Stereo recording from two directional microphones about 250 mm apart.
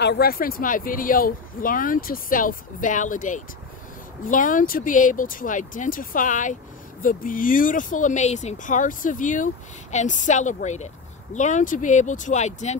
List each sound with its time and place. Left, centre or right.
0.0 s speech: left